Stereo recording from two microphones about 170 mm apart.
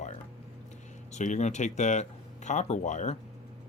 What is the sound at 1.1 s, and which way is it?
Speech, 45° left (ahead or behind).